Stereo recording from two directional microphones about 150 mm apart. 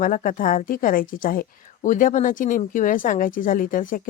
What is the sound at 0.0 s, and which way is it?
A woman's voice, 65° left (ahead or behind).